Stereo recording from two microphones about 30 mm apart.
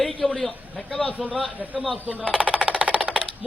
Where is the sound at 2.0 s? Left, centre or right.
Right.